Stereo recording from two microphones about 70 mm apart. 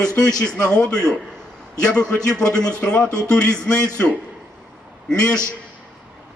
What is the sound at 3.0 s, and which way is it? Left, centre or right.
Speech, right.